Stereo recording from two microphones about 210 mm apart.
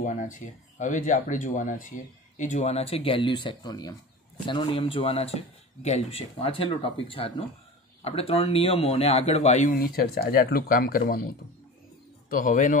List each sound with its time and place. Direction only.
0.0 s speech: 35° left (ahead or behind)
12.3 s speech: 40° left (ahead or behind)